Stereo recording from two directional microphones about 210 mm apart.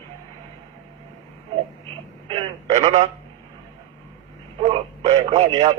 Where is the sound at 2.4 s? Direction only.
30° right (ahead or behind).